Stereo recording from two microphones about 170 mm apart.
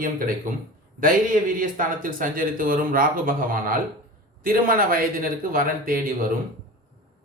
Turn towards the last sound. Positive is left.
turn(degrees=-55)  # may be behind; listen again after turning